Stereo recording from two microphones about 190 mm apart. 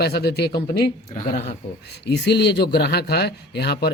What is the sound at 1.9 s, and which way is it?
Speech, 60° left (ahead or behind).